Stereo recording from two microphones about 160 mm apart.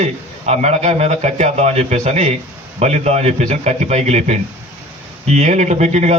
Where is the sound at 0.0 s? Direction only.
40° right (ahead or behind).